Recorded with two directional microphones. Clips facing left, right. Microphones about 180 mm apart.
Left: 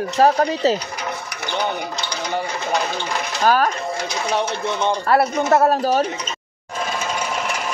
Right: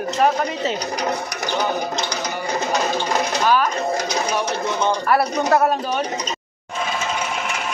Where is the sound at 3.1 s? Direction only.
40° right (ahead or behind).